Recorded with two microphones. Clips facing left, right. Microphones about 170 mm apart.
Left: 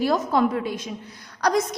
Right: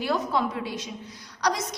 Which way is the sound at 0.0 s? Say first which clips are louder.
Left 5 dB; 45° left (ahead or behind).